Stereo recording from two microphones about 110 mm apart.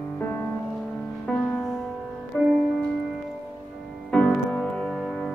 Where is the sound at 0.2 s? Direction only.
20° left (ahead or behind).